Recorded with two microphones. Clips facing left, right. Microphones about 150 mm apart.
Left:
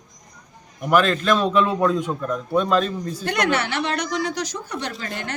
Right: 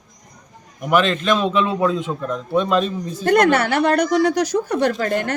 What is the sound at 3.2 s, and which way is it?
Speech, 50° right (ahead or behind).